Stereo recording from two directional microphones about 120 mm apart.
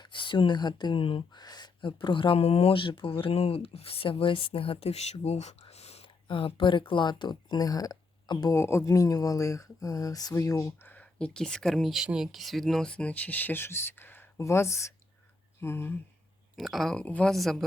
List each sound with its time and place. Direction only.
0.0 s speech: 40° left (ahead or behind); by 6.1 s 60° left (ahead or behind)
6.2 s speech: 45° left (ahead or behind)
8.5 s speech: 20° left (ahead or behind)
10.8 s speech: 10° left (ahead or behind)
16.6 s speech: centre (ahead or behind)